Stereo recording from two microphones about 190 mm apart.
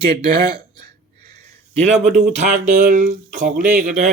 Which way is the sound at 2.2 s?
45° right (ahead or behind).